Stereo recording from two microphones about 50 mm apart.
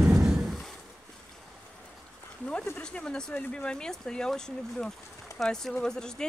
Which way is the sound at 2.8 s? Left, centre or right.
Centre.